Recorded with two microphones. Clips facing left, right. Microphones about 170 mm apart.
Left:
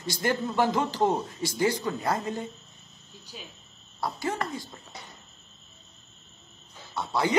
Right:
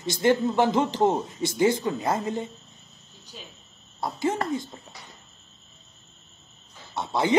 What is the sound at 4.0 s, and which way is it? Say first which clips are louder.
Speech: right 4 dB; 20° right (ahead or behind).